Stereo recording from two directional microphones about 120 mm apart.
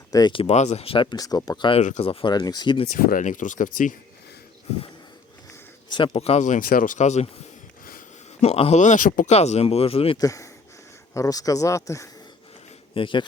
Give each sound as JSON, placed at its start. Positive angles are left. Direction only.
{"t": 0.1, "sound": "speech", "side_deg": 35}
{"t": 0.4, "sound": "speech", "side_deg": 70}
{"t": 1.1, "sound": "speech", "side_deg": 30}
{"t": 1.8, "sound": "speech", "side_deg": 90}
{"t": 2.0, "sound": "speech", "side_deg": 40}
{"t": 2.9, "sound": "speech", "side_deg": 90}
{"t": 5.9, "sound": "speech", "side_deg": 50}
{"t": 8.4, "sound": "speech", "side_deg": 55}
{"t": 8.8, "sound": "speech", "side_deg": 85}
{"t": 10.2, "sound": "speech", "side_deg": 30}
{"t": 12.9, "sound": "speech", "side_deg": 45}